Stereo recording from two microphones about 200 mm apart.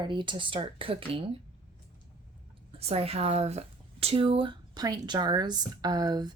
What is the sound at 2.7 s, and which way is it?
Speech, 30° right (ahead or behind).